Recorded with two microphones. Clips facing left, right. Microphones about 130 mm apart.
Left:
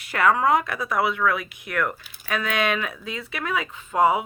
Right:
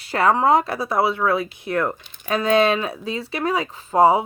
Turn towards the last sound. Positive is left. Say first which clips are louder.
# right 5 dB
turn(degrees=-35)  # may be behind; listen again after turning